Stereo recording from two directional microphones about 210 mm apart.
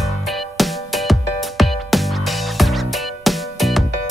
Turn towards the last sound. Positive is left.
turn(degrees=0)  # may be behind; listen again after turning